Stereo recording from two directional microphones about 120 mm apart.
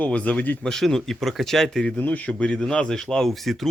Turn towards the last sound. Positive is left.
turn(degrees=0)  # may be behind; listen again after turning